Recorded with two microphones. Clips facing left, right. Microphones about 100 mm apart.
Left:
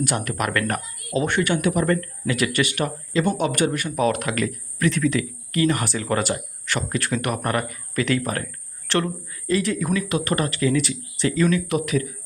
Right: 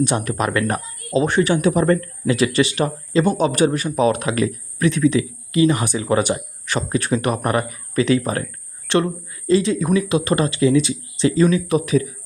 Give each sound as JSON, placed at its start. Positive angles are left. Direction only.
{"t": 0.0, "sound": "speech", "side_deg": -25}